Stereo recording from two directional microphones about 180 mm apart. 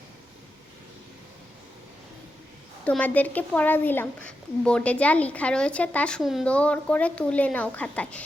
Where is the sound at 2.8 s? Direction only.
10° left (ahead or behind).